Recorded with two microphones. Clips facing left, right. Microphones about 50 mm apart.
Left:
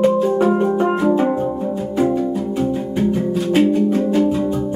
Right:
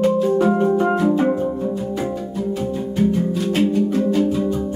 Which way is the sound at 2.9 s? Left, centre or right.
Centre.